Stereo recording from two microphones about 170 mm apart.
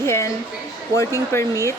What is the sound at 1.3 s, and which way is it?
Speech, 15° left (ahead or behind).